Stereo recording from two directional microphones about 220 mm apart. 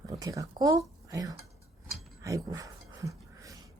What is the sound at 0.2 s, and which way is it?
Speech, 15° right (ahead or behind).